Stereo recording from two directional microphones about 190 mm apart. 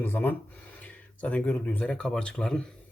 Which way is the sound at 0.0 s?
10° left (ahead or behind).